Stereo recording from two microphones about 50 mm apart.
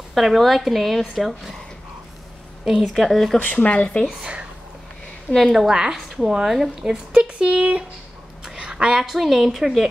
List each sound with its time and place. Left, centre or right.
0.1 s a woman's voice: centre
2.6 s a woman's voice: centre
2.9 s a woman's voice: centre
3.4 s speech: left
5.5 s a woman's voice: centre
6.8 s a woman's voice: centre
8.5 s a sound: centre
9.0 s a woman's voice: centre